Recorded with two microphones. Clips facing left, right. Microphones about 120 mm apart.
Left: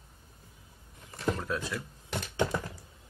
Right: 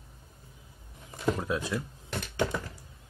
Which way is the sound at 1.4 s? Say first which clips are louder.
Right 3 dB; 15° right (ahead or behind).